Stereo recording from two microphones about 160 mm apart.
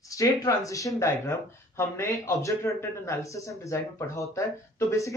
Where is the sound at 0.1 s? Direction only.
20° left (ahead or behind).